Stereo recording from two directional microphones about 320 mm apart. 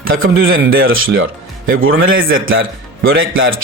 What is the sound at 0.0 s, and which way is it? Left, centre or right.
A man's voice, right.